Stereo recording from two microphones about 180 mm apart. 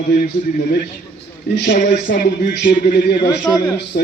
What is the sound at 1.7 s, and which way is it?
A man's voice, 45° left (ahead or behind).